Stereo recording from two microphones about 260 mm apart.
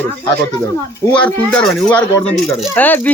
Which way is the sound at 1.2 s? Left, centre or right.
Centre.